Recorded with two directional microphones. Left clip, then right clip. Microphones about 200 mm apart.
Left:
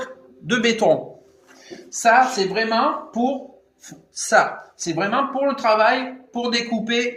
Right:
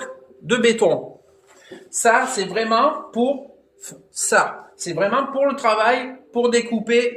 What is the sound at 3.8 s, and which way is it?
A man's voice, 20° right (ahead or behind).